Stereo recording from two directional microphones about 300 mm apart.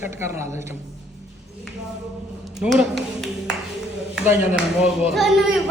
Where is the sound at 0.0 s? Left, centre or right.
Centre.